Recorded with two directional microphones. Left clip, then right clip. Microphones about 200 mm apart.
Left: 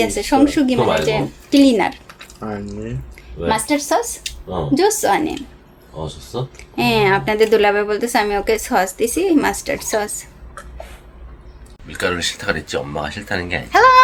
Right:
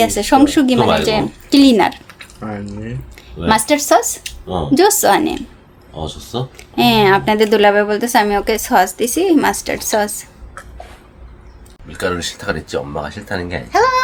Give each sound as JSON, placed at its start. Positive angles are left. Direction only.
{"t": 0.0, "sound": "speech", "side_deg": -25}
{"t": 2.1, "sound": "speech", "side_deg": -5}
{"t": 3.2, "sound": "speech", "side_deg": -30}
{"t": 6.6, "sound": "a woman's voice", "side_deg": -20}
{"t": 11.9, "sound": "speech", "side_deg": -25}
{"t": 13.7, "sound": "speech", "side_deg": 0}